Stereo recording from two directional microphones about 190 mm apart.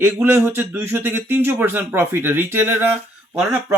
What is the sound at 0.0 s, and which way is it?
Speech, 10° right (ahead or behind).